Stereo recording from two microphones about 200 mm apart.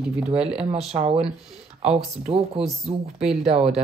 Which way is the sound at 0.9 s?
30° right (ahead or behind).